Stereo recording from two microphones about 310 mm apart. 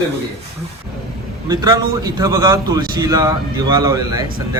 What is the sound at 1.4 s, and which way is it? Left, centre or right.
A man's voice, centre.